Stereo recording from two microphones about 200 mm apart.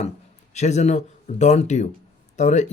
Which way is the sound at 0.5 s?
35° left (ahead or behind).